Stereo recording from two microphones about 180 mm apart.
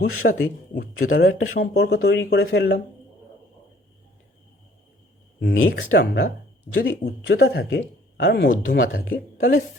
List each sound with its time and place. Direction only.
0.0 s speech: 60° left (ahead or behind)
1.5 s speech: 65° left (ahead or behind)
5.4 s speech: 75° left (ahead or behind); by 9.6 s 55° left (ahead or behind)